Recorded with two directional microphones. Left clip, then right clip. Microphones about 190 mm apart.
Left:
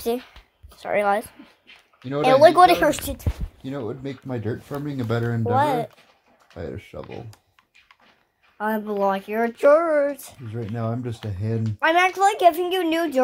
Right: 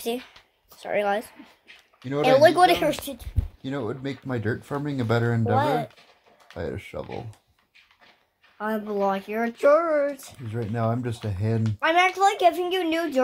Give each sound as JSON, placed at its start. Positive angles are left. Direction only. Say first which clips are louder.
{"t": 0.7, "sound": "speech", "louder": "left 4 dB", "side_deg": 5}
{"t": 2.8, "sound": "a woman's voice", "louder": "left 4 dB", "side_deg": 30}
{"t": 3.6, "sound": "speech", "louder": "even", "side_deg": -10}
{"t": 5.4, "sound": "speech", "louder": "left 6 dB", "side_deg": 35}
{"t": 6.5, "sound": "speech", "louder": "right 2 dB", "side_deg": -10}
{"t": 8.5, "sound": "speech", "louder": "left 3 dB", "side_deg": 40}
{"t": 10.4, "sound": "speech", "louder": "right 4 dB", "side_deg": -10}
{"t": 11.8, "sound": "speech", "louder": "left 2 dB", "side_deg": 35}